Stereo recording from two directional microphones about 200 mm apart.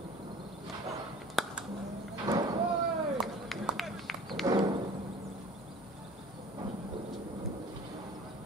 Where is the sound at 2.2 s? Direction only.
20° right (ahead or behind).